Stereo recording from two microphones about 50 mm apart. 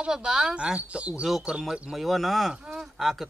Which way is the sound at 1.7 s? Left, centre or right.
Centre.